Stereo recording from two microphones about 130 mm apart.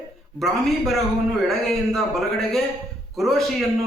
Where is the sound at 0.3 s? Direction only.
Centre (ahead or behind).